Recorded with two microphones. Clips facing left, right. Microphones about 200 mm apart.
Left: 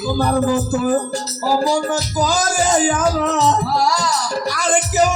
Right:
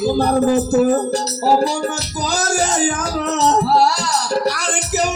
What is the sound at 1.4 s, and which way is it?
Music, 25° right (ahead or behind).